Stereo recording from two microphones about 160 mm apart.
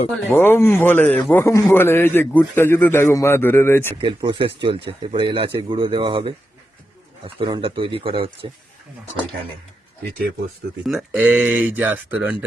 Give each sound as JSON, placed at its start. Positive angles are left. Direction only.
{"t": 0.3, "sound": "a man's voice", "side_deg": 15}
{"t": 4.0, "sound": "speech", "side_deg": -30}
{"t": 7.3, "sound": "speech", "side_deg": -30}
{"t": 11.1, "sound": "speech", "side_deg": -10}